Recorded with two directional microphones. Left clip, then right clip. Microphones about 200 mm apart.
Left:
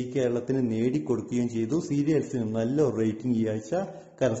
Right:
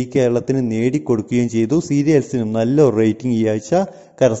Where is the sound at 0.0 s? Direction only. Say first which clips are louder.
Right 10 dB; 40° right (ahead or behind).